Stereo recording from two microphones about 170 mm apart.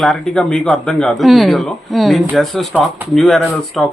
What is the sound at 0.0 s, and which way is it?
Speech, centre (ahead or behind).